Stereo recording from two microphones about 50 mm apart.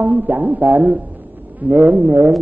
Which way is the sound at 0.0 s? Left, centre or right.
Right.